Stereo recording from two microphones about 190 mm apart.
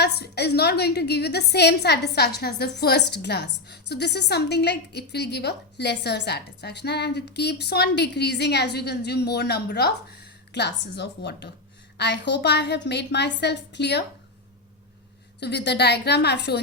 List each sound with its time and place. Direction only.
0.0 s a woman's voice: 60° left (ahead or behind)
15.4 s a woman's voice: 60° left (ahead or behind)